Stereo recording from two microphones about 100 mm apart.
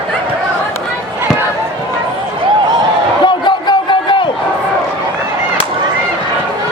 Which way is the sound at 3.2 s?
50° left (ahead or behind).